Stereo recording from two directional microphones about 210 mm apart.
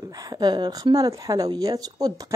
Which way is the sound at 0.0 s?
20° right (ahead or behind).